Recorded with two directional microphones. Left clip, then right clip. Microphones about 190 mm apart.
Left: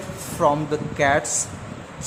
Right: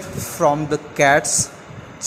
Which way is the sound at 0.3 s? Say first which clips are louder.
Right 2 dB; 15° right (ahead or behind).